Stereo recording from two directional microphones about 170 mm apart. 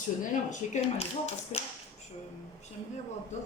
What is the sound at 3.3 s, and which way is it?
Speech, 45° left (ahead or behind).